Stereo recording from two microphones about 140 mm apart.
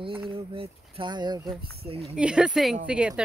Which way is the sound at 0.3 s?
40° right (ahead or behind).